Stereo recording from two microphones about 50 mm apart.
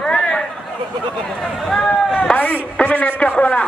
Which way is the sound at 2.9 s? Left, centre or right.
Left.